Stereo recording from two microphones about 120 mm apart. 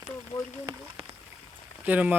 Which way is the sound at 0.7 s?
35° right (ahead or behind).